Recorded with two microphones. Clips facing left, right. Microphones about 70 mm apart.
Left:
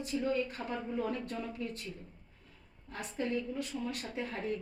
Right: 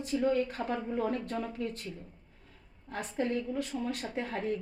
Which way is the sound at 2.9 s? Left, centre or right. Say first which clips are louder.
Right 5 dB; right.